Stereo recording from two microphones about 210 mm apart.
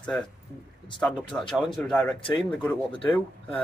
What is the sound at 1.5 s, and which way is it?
Speech, centre (ahead or behind).